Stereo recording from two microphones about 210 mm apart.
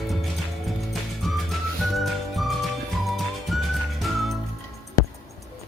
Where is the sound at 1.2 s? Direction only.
Centre (ahead or behind).